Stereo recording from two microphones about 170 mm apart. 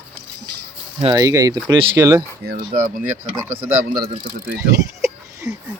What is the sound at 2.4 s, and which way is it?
Speech, 70° right (ahead or behind).